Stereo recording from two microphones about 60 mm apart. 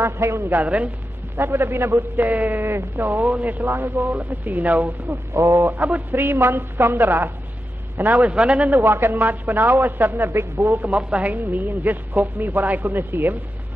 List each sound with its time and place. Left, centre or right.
0.0 s speech: right
0.5 s speech: right
1.3 s a man's voice: right
3.5 s speech: right
5.3 s speech: right
5.7 s speech: right
6.1 s a man's voice: right; by 8.6 s centre
8.8 s a man's voice: right
10.3 s speech: right
10.8 s a man's voice: right